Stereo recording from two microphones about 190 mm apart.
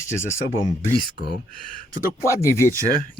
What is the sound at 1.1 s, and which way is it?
Speech, 60° left (ahead or behind).